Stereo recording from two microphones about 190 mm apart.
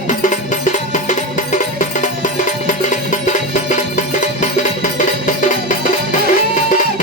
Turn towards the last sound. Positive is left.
turn(degrees=40)  # may be behind; listen again after turning